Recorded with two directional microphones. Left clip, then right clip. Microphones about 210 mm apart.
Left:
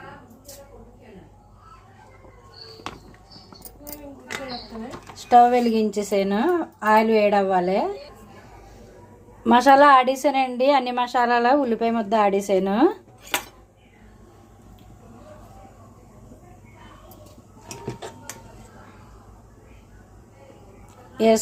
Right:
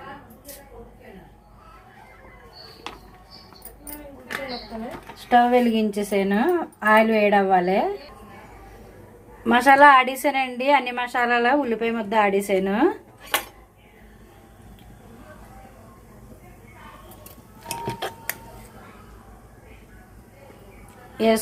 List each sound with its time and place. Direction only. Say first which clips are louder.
5.3 s a woman's voice: left 2 dB; 15° left (ahead or behind)
9.4 s a woman's voice: even; 15° left (ahead or behind)